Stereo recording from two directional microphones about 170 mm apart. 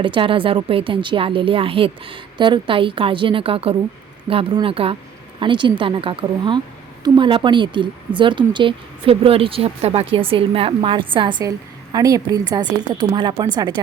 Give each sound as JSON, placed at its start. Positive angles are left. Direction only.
{"t": 0.0, "sound": "a woman's voice", "side_deg": -30}